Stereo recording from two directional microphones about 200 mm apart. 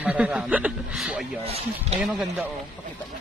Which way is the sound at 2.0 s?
5° right (ahead or behind).